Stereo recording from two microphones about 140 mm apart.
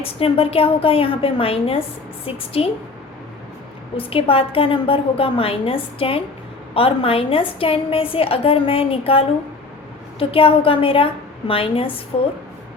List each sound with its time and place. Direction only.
0.0 s a woman's voice: 45° left (ahead or behind)
3.9 s a woman's voice: 40° left (ahead or behind)